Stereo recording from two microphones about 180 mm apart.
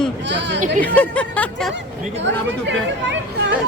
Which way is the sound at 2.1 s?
90° right.